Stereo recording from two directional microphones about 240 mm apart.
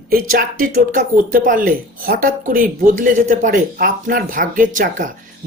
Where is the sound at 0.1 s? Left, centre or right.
Right.